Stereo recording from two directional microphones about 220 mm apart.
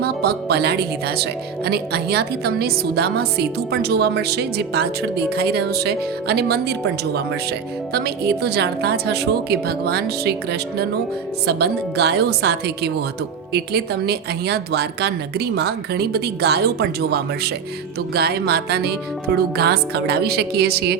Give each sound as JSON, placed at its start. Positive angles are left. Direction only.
{"t": 0.0, "sound": "a woman's voice", "side_deg": -45}